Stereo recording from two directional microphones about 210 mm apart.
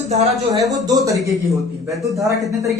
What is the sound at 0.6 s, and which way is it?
Speech, 15° right (ahead or behind).